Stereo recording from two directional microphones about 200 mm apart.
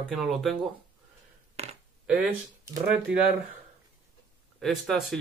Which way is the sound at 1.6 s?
35° right (ahead or behind).